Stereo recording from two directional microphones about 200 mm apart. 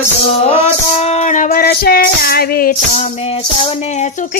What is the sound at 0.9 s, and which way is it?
Female singing, 40° left (ahead or behind).